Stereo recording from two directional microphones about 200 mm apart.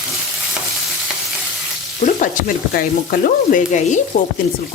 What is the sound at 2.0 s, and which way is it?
Frying, 40° left (ahead or behind).